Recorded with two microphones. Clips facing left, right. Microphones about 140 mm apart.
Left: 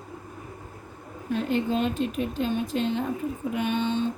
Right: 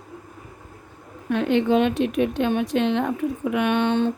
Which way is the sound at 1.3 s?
75° right (ahead or behind).